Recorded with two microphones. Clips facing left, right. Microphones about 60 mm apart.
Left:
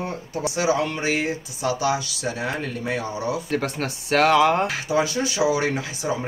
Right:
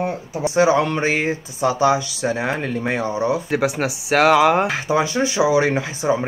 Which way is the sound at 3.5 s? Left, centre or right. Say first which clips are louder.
Right 5 dB; centre.